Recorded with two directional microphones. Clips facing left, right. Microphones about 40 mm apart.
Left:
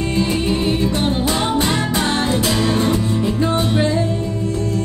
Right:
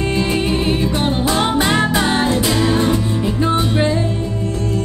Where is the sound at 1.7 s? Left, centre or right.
Right.